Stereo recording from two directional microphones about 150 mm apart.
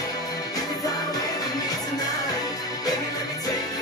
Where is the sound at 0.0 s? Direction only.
25° left (ahead or behind).